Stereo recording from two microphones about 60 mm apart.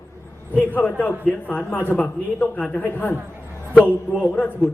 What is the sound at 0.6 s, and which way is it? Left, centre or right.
Speech, left.